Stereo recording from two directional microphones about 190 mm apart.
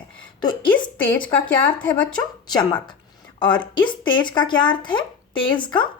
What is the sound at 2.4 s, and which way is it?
A woman's voice, 20° left (ahead or behind).